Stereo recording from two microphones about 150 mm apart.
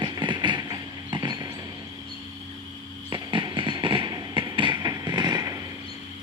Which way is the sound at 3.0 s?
30° right (ahead or behind).